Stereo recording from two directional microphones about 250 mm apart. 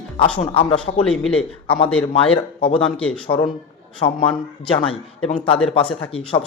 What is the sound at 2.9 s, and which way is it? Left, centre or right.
Speech, centre.